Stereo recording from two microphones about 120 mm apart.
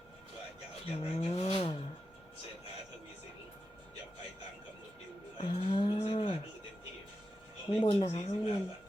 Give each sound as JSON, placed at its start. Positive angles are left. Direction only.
{"t": 0.9, "sound": "vehicle", "side_deg": 60}
{"t": 5.4, "sound": "a sound", "side_deg": 55}
{"t": 7.7, "sound": "speech", "side_deg": 50}